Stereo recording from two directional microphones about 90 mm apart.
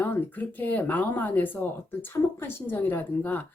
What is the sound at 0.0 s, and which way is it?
Speech, 20° left (ahead or behind).